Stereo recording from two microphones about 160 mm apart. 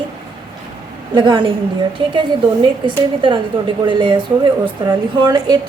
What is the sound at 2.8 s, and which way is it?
A woman's voice, 30° right (ahead or behind).